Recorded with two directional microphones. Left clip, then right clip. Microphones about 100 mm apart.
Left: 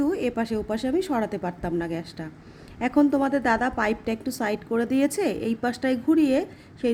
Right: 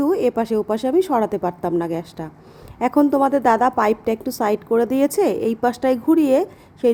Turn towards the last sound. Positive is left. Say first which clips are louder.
# right 8 dB
turn(degrees=-45)  # may be behind; listen again after turning